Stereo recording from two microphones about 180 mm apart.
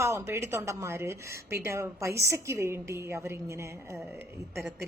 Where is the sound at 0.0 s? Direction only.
15° right (ahead or behind).